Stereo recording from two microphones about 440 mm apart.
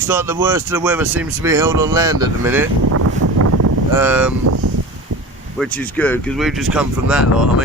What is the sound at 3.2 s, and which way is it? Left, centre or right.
Wind noise, right.